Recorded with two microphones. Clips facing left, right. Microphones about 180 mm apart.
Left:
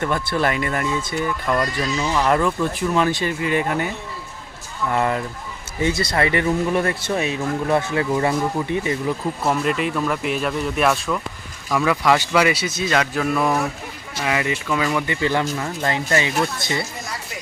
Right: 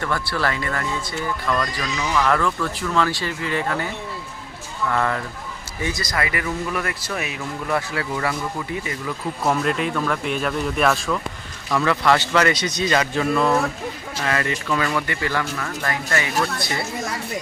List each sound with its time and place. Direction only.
0.0 s speech: 20° left (ahead or behind)
2.1 s speech: 15° left (ahead or behind)
4.9 s speech: 20° left (ahead or behind)
9.4 s a man's voice: 5° left (ahead or behind); by 16.7 s 20° left (ahead or behind)